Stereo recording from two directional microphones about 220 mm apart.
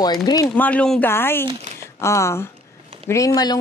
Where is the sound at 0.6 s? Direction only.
5° left (ahead or behind).